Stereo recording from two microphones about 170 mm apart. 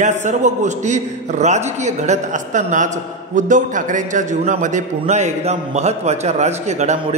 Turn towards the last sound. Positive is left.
turn(degrees=-45)  # may be behind; listen again after turning